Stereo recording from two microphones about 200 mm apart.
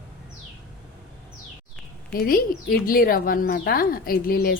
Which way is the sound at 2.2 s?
45° left (ahead or behind).